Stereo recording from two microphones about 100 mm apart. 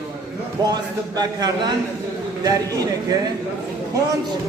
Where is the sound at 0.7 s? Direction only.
40° right (ahead or behind).